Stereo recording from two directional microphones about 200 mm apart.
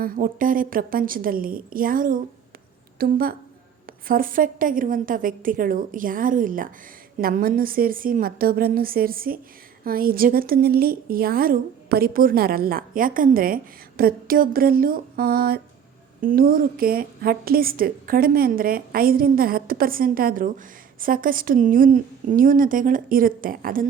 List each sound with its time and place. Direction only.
0.0 s a woman's voice: 45° right (ahead or behind)